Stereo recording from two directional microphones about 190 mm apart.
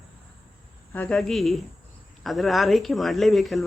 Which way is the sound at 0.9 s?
5° left (ahead or behind).